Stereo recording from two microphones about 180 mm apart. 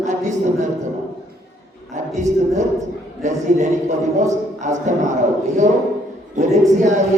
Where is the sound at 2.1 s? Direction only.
40° right (ahead or behind).